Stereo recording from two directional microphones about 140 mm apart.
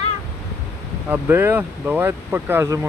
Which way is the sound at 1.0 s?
15° right (ahead or behind).